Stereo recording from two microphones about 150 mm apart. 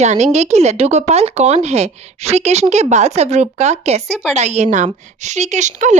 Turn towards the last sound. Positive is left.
turn(degrees=-50)  # may be behind; listen again after turning